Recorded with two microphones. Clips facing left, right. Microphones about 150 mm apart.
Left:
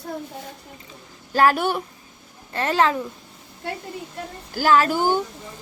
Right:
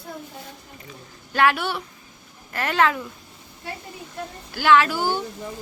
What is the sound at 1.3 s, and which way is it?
Speech, 40° left (ahead or behind).